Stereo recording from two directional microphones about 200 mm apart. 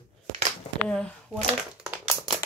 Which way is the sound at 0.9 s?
5° left (ahead or behind).